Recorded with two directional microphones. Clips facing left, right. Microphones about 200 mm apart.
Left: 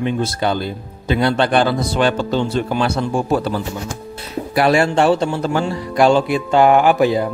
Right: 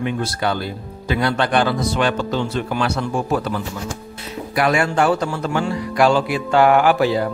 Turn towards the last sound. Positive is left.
turn(degrees=20)  # may be behind; listen again after turning